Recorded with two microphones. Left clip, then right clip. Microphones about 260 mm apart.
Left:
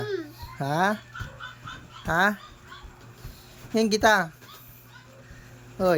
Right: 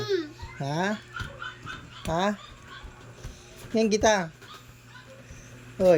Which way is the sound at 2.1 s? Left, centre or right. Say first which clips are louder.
Left 4 dB; centre.